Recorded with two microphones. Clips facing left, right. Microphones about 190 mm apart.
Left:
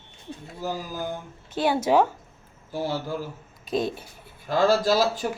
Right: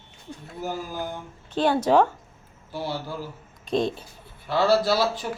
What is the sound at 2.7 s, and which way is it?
Speech, 45° left (ahead or behind).